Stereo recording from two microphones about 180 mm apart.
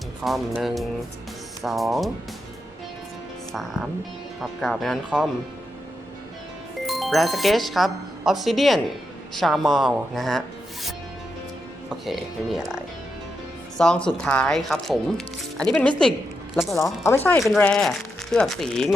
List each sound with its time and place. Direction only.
0.3 s speech: centre (ahead or behind)
3.5 s speech: centre (ahead or behind)
6.8 s speech: centre (ahead or behind)
11.9 s speech: centre (ahead or behind)
16.7 s speech: 15° left (ahead or behind)